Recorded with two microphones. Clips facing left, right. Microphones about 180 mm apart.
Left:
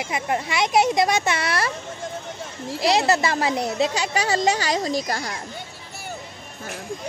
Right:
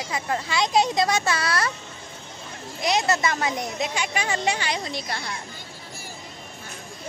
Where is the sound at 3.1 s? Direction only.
30° left (ahead or behind).